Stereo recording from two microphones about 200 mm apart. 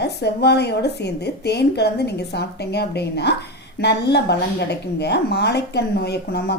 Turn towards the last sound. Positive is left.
turn(degrees=55)  # may be behind; listen again after turning